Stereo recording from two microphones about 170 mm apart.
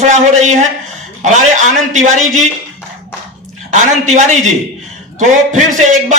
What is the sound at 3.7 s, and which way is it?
A man's voice, 45° right (ahead or behind).